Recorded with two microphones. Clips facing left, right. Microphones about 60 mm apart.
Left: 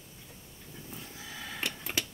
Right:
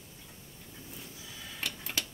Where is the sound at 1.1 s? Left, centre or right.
Left.